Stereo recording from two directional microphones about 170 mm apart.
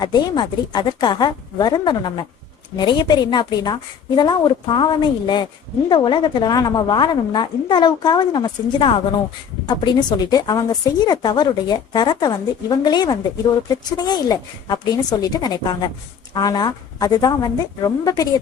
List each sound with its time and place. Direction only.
0.0 s a woman's voice: 25° left (ahead or behind)